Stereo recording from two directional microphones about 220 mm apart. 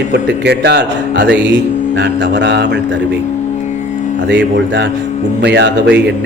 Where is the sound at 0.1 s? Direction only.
50° right (ahead or behind).